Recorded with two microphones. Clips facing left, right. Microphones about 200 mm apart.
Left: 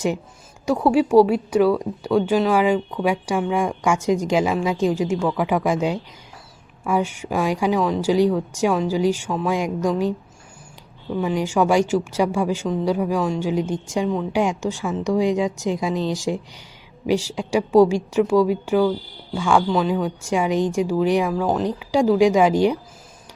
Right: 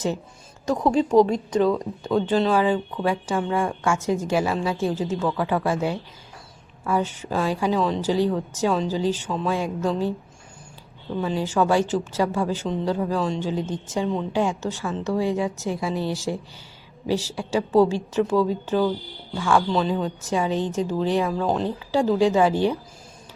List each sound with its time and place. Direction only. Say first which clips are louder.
0.6 s a woman's voice: left 3 dB; 10° left (ahead or behind)
11.2 s a woman's voice: left 3 dB; 15° left (ahead or behind)